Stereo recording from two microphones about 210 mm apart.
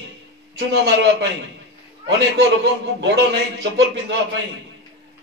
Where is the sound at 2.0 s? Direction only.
55° right (ahead or behind).